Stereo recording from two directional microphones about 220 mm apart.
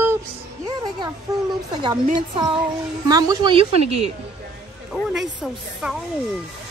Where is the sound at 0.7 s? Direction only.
20° right (ahead or behind).